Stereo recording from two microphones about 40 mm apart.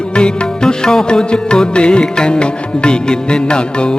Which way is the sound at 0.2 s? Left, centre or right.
Left.